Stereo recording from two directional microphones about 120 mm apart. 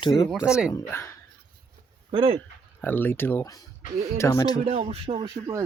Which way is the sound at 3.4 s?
30° left (ahead or behind).